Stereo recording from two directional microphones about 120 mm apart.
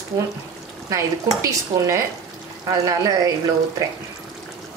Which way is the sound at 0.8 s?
25° right (ahead or behind).